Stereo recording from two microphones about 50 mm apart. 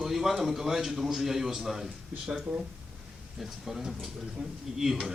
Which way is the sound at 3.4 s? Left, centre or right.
Centre.